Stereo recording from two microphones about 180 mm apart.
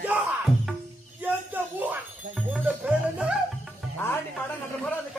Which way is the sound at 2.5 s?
5° right (ahead or behind).